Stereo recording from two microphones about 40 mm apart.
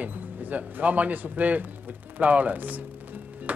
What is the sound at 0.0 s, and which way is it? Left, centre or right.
Speech, right.